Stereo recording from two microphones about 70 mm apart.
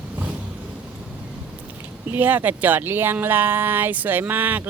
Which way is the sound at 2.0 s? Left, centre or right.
Right.